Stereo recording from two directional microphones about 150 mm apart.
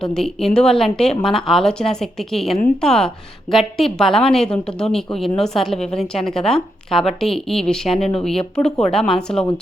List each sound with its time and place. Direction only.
0.0 s a woman's voice: 5° left (ahead or behind)